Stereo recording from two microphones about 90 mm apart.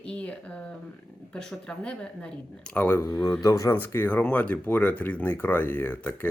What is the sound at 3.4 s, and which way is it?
Speech, 35° left (ahead or behind).